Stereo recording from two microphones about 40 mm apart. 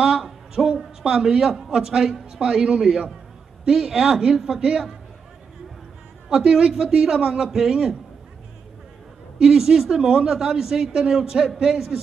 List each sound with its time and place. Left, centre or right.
0.0 s a sound: centre
1.8 s a man's voice: centre
6.2 s a woman's voice: centre
9.4 s a man's voice: centre